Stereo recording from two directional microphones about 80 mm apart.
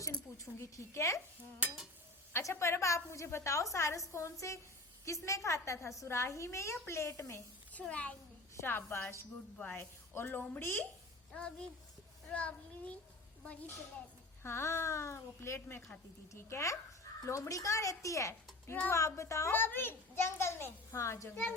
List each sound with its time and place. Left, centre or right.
0.3 s a woman's voice: left
2.3 s a woman's voice: left
7.7 s a child's voice: centre
8.5 s a woman's voice: left
11.3 s a child's voice: centre
14.4 s a woman's voice: left
19.5 s a woman's voice: left
21.2 s speech: left